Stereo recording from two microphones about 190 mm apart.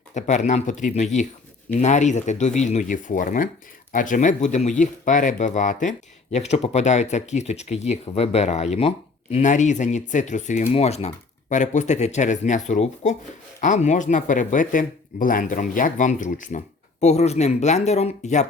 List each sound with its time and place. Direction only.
0.1 s speech: 40° left (ahead or behind)